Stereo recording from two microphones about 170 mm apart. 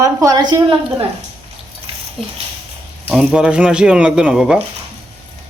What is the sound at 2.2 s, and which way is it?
Speech, centre (ahead or behind).